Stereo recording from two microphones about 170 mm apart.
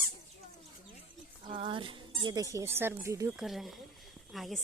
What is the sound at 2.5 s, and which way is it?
Speech, 15° right (ahead or behind).